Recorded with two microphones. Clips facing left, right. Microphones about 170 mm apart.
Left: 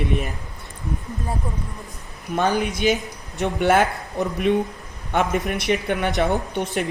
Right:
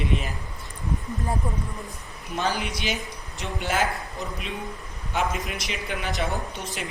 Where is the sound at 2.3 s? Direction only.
55° left (ahead or behind).